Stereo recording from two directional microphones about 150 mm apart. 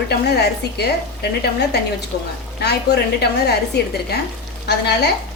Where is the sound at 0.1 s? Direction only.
90° left.